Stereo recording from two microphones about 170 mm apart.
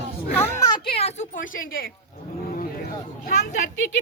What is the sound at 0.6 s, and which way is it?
A child's voice, 25° left (ahead or behind).